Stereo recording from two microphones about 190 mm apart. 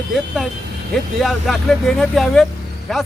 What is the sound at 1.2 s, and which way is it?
Speech, centre (ahead or behind).